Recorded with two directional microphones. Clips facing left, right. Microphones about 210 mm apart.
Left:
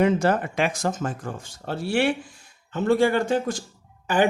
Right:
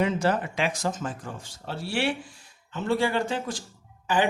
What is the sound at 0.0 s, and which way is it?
Speech, 50° left (ahead or behind).